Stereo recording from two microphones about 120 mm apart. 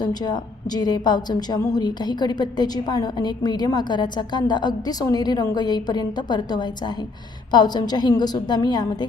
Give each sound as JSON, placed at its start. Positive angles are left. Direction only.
{"t": 0.0, "sound": "a woman's voice", "side_deg": 35}